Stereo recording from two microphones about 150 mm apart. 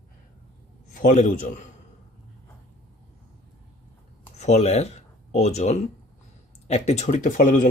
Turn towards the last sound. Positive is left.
turn(degrees=60)  # may be behind; listen again after turning